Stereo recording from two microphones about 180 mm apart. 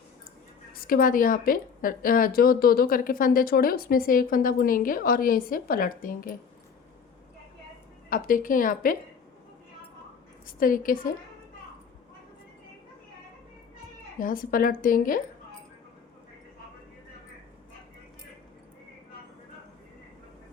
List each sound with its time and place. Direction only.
0.7 s a woman's voice: 55° left (ahead or behind)
8.1 s a woman's voice: 50° left (ahead or behind)
10.4 s a woman's voice: 50° left (ahead or behind)
14.2 s a woman's voice: 50° left (ahead or behind)